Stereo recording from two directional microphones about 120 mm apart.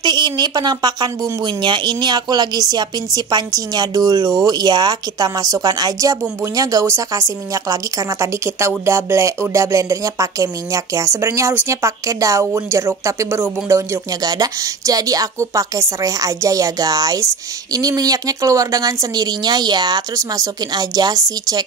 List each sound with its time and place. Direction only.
0.0 s speech: 40° right (ahead or behind)